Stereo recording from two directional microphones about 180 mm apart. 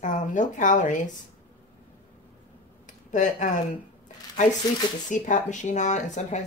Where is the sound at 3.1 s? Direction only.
45° left (ahead or behind).